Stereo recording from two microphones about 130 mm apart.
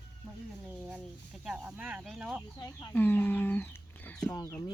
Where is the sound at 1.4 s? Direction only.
5° right (ahead or behind).